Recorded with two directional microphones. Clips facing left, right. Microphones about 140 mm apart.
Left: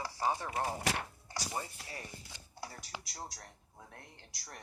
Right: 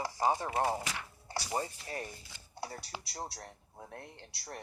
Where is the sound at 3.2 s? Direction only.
30° right (ahead or behind).